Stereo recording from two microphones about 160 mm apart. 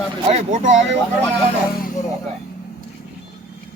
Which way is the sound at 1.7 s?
65° left (ahead or behind).